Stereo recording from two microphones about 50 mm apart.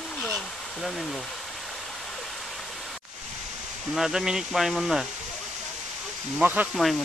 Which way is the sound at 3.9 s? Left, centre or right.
Centre.